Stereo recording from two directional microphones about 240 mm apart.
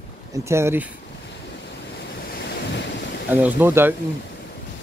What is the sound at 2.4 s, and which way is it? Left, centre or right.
Waves, left.